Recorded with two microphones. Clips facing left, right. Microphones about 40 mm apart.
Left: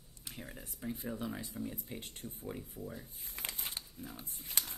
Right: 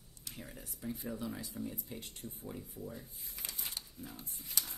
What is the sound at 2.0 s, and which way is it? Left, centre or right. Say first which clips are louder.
Speech: left 1 dB; left.